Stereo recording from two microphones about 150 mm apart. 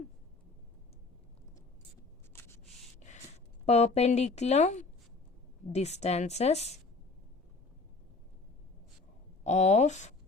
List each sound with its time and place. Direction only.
2.3 s a sound: 15° left (ahead or behind)
3.7 s speech: 45° left (ahead or behind)
9.4 s speech: 50° left (ahead or behind)